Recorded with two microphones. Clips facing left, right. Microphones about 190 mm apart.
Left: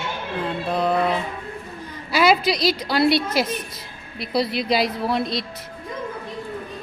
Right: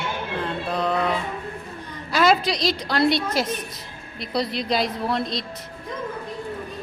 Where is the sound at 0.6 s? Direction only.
5° left (ahead or behind).